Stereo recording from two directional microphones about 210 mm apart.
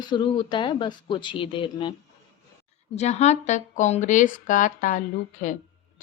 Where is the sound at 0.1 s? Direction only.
20° left (ahead or behind).